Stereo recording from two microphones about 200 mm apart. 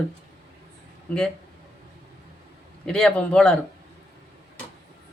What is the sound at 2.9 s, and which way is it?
Speech, 5° left (ahead or behind).